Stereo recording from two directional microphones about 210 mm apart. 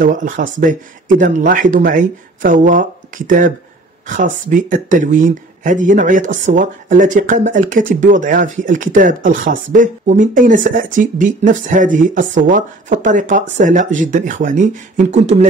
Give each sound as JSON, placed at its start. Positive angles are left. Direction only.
{"t": 0.0, "sound": "speech", "side_deg": -40}